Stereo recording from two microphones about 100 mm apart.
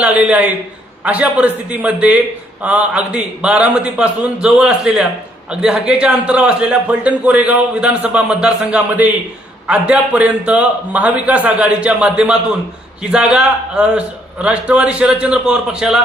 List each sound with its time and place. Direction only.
0.0 s a man's voice: 15° right (ahead or behind)